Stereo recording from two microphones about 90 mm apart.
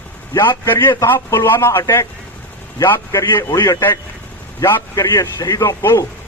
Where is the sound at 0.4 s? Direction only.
25° left (ahead or behind).